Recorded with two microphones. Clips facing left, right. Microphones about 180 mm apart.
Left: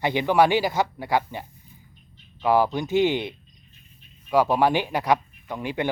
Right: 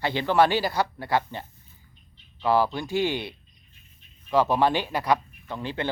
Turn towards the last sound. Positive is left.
turn(degrees=15)  # may be behind; listen again after turning